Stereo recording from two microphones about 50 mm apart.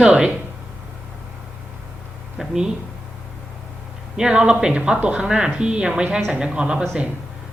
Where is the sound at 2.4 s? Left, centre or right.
Centre.